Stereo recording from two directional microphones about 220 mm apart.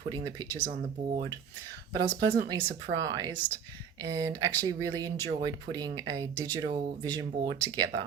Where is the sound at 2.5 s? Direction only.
20° right (ahead or behind).